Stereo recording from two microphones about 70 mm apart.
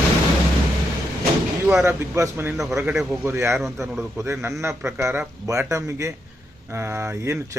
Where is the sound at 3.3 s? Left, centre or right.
Right.